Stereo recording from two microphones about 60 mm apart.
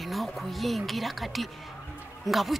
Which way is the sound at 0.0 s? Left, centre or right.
Centre.